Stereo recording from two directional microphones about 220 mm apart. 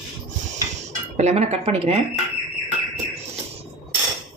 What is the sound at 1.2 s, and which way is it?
Speech, 30° right (ahead or behind).